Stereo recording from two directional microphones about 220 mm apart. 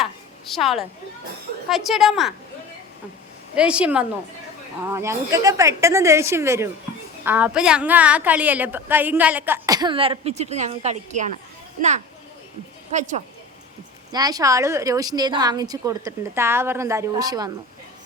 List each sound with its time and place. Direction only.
0.0 s a sound: centre (ahead or behind)
1.7 s a woman's voice: centre (ahead or behind)
3.5 s a woman's voice: 5° right (ahead or behind); by 11.3 s 30° right (ahead or behind)
12.9 s speech: 35° right (ahead or behind)
14.1 s a woman's voice: 15° right (ahead or behind)